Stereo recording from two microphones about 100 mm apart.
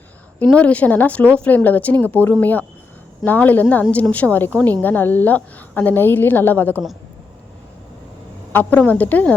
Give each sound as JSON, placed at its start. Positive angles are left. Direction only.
{"t": 0.5, "sound": "a woman's voice", "side_deg": 15}
{"t": 8.5, "sound": "speech", "side_deg": 15}